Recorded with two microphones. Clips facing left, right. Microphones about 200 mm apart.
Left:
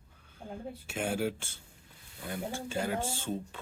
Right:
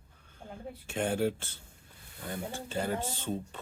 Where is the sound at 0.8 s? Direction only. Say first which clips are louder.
Right 3 dB; 10° left (ahead or behind).